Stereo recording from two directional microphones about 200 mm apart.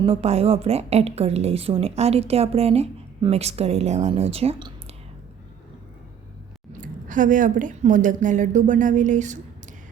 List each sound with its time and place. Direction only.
0.0 s a woman's voice: 30° right (ahead or behind)
6.7 s a woman's voice: 40° right (ahead or behind)